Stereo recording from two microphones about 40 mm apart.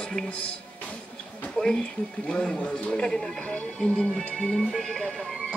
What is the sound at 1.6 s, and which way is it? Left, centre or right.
A man's voice, centre.